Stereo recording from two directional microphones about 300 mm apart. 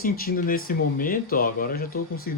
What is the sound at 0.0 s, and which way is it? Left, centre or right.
Speech, left.